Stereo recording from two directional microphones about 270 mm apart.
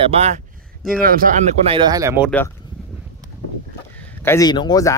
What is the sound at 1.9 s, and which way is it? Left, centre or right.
Speech, centre.